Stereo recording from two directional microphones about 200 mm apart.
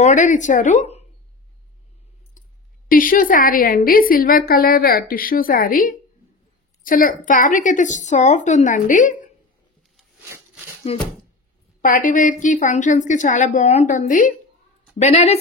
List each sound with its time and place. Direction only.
0.0 s a woman's voice: 40° left (ahead or behind)
2.9 s a woman's voice: 45° left (ahead or behind)
10.3 s a sound: 5° right (ahead or behind)
10.9 s speech: 30° left (ahead or behind)
11.8 s a woman's voice: 40° left (ahead or behind)